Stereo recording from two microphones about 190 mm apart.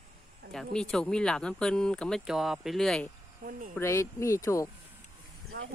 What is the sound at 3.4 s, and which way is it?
Speech, 45° right (ahead or behind).